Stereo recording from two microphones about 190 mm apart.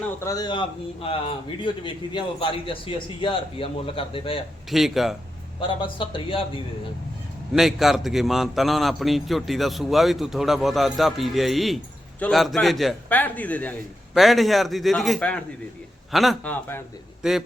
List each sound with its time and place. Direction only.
0.2 s a man's voice: 20° left (ahead or behind)
4.7 s a man's voice: centre (ahead or behind)
5.5 s a man's voice: 25° left (ahead or behind)
7.5 s a man's voice: centre (ahead or behind)
17.2 s a man's voice: centre (ahead or behind)